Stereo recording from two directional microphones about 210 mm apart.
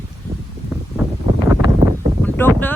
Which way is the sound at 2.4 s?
10° left (ahead or behind).